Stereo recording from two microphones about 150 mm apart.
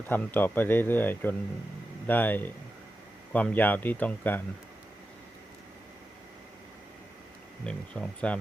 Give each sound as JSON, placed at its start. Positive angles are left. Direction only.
{"t": 0.1, "sound": "speech", "side_deg": 10}
{"t": 7.6, "sound": "speech", "side_deg": 5}